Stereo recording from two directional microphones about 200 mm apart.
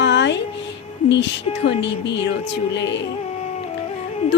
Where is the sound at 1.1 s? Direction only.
60° left (ahead or behind).